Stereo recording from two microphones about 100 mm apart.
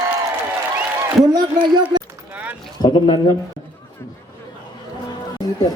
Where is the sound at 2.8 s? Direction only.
50° left (ahead or behind).